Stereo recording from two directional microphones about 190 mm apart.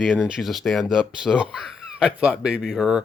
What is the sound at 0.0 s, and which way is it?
Speech, 5° right (ahead or behind).